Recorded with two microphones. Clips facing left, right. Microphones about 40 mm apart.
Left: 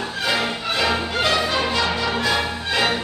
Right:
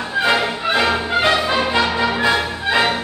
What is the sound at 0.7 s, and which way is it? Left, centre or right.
Music, centre.